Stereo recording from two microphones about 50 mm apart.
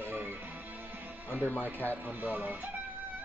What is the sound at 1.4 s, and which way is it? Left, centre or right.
Speech, left.